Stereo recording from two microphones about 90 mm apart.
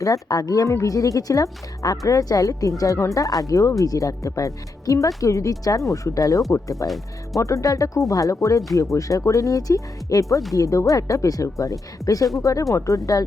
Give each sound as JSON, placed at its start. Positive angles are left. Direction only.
{"t": 0.0, "sound": "speech", "side_deg": 45}